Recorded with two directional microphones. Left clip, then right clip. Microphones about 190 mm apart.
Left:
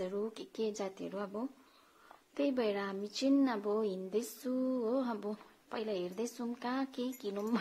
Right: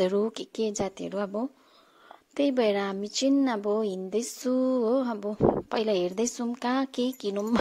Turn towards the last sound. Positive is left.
turn(degrees=-40)  # may be behind; listen again after turning